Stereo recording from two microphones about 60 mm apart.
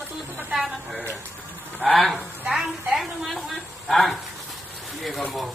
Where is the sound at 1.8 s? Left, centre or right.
Centre.